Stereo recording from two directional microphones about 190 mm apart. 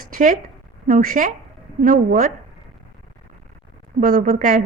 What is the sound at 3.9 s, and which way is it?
Speech, 45° right (ahead or behind).